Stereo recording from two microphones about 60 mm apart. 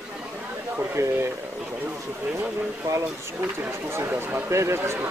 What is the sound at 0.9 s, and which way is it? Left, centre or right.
Speech, right.